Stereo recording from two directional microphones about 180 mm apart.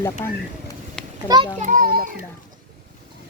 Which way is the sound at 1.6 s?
50° right (ahead or behind).